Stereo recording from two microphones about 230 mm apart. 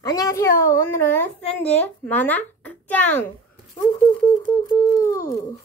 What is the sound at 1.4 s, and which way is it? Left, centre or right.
Speech, left.